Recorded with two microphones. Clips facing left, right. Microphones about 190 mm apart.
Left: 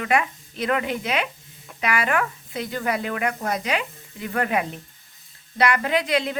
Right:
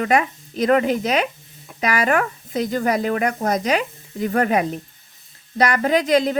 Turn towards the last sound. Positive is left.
turn(degrees=-40)  # may be behind; listen again after turning